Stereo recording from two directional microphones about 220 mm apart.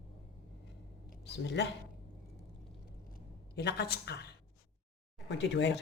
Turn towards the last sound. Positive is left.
turn(degrees=50)  # may be behind; listen again after turning